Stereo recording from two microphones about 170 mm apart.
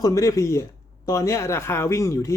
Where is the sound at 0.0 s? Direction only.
20° left (ahead or behind).